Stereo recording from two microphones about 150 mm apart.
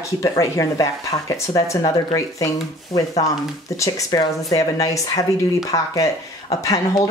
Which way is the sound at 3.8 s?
20° left (ahead or behind).